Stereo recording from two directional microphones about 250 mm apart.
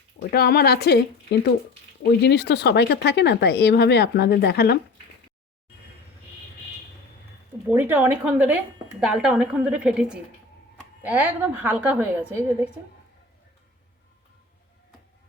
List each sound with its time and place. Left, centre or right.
0.2 s speech: left
7.7 s a woman's voice: centre